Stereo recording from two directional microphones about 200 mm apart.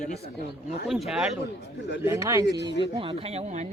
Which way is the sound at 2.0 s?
15° right (ahead or behind).